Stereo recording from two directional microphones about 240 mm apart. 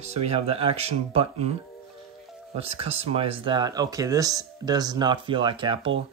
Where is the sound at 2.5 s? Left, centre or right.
Right.